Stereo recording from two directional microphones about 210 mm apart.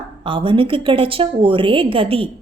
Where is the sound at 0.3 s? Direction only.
25° right (ahead or behind).